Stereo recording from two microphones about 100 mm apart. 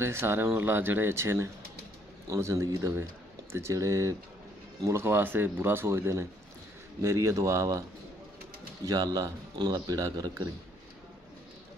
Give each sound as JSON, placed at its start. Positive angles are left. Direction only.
{"t": 0.0, "sound": "a man's voice", "side_deg": -25}
{"t": 8.8, "sound": "a man's voice", "side_deg": -40}